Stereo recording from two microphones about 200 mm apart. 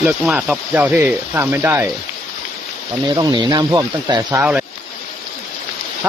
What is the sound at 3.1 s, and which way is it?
Speech, 20° right (ahead or behind).